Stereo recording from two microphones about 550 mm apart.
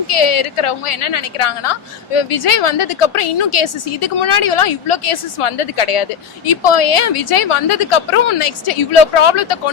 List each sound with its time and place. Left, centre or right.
0.1 s a woman's voice: left